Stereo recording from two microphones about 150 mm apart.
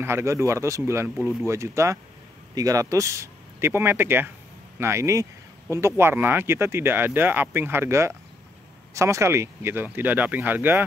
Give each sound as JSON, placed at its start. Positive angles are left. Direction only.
{"t": 0.0, "sound": "speech", "side_deg": -15}